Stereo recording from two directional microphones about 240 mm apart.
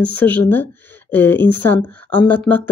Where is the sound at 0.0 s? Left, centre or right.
Centre.